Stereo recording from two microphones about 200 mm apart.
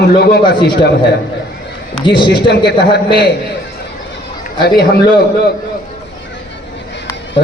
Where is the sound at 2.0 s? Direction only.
25° left (ahead or behind).